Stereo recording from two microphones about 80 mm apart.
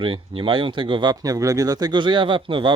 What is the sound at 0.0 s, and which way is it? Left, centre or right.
Speech, right.